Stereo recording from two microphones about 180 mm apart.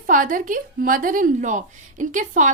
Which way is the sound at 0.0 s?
50° right (ahead or behind).